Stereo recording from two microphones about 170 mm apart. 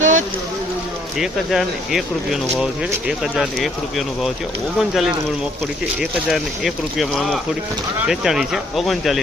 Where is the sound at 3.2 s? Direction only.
Centre (ahead or behind).